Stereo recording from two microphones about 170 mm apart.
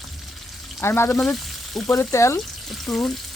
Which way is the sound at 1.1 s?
Centre (ahead or behind).